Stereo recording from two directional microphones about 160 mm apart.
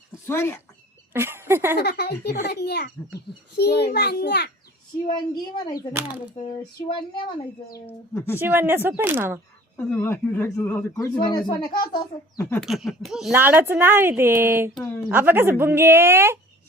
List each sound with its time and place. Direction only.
0.3 s speech: 15° left (ahead or behind)
1.1 s speech: 15° right (ahead or behind)
1.8 s a child's voice: 85° left
5.0 s speech: 25° left (ahead or behind)
7.9 s speech: 15° left (ahead or behind)
8.4 s speech: 10° right (ahead or behind)
9.7 s speech: 15° left (ahead or behind)
12.5 s speech: centre (ahead or behind)
13.3 s speech: 10° right (ahead or behind)
14.8 s speech: 10° left (ahead or behind)
15.1 s speech: 15° right (ahead or behind)